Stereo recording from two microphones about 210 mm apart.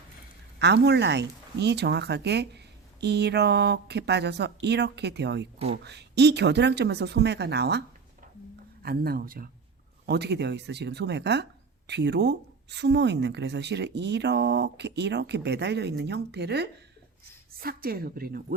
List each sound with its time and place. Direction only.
0.6 s speech: 55° right (ahead or behind)